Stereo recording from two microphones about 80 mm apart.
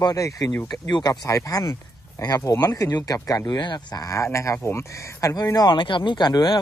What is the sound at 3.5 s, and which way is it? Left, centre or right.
Speech, left.